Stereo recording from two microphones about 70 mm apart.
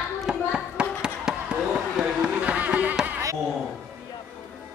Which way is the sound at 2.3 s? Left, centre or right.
Right.